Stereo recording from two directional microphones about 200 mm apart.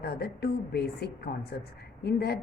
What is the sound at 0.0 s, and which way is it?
A woman's voice, 50° left (ahead or behind).